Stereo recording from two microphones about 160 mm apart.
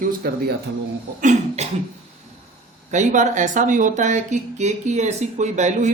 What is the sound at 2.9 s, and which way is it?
Speech, 50° right (ahead or behind).